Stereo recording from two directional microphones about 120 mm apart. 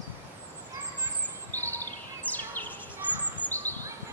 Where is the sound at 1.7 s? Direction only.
15° left (ahead or behind).